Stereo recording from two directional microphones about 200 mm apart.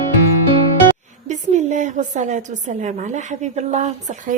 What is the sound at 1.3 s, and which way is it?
A woman's voice, 35° right (ahead or behind).